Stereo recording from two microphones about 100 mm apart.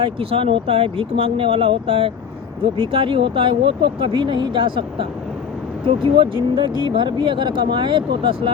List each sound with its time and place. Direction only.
0.0 s speech: 65° right (ahead or behind)